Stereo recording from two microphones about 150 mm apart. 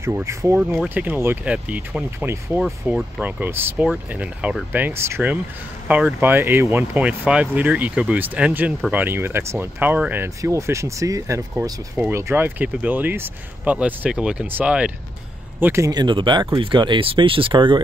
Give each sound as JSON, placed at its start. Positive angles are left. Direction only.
{"t": 0.0, "sound": "speech", "side_deg": -20}
{"t": 2.6, "sound": "speech", "side_deg": -5}
{"t": 15.6, "sound": "speech", "side_deg": -20}